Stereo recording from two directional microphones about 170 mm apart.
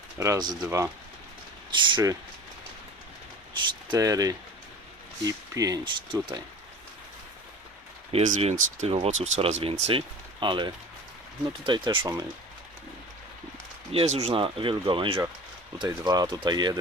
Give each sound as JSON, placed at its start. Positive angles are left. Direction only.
{"t": 0.2, "sound": "speech", "side_deg": -20}
{"t": 1.7, "sound": "speech", "side_deg": -25}
{"t": 3.8, "sound": "speech", "side_deg": -20}
{"t": 8.1, "sound": "speech", "side_deg": -40}
{"t": 13.9, "sound": "speech", "side_deg": -35}